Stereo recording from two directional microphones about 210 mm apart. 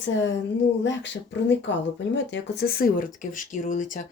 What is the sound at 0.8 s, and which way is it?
Speech, 60° left (ahead or behind).